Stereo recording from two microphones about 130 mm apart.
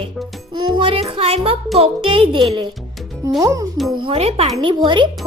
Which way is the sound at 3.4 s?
25° right (ahead or behind).